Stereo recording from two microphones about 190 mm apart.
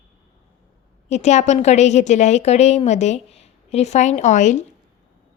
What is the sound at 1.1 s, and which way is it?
A woman's voice, 35° left (ahead or behind).